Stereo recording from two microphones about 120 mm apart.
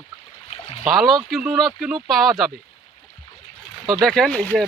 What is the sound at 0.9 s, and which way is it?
Speech, centre (ahead or behind).